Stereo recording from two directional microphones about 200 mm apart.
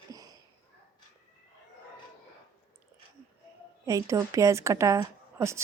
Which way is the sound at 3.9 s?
15° right (ahead or behind).